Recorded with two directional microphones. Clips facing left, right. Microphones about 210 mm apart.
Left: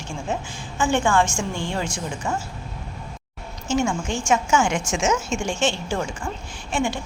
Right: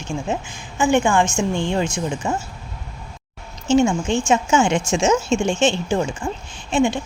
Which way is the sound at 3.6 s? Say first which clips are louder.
Right 6 dB; 25° right (ahead or behind).